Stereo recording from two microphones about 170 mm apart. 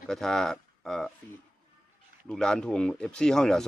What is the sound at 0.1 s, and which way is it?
Speech, centre (ahead or behind).